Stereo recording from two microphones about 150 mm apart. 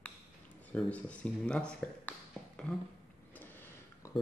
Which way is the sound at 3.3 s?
15° left (ahead or behind).